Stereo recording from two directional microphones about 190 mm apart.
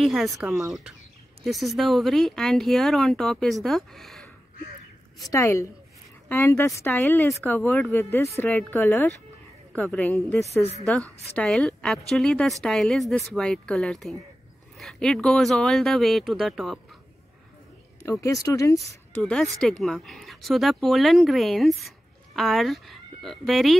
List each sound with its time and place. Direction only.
0.0 s speech: centre (ahead or behind)
5.2 s speech: 15° left (ahead or behind); by 16.8 s centre (ahead or behind)
18.0 s speech: 15° left (ahead or behind)
19.2 s speech: 5° left (ahead or behind)